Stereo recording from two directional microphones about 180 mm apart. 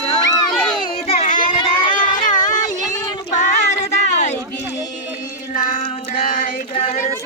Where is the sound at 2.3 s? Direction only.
45° left (ahead or behind).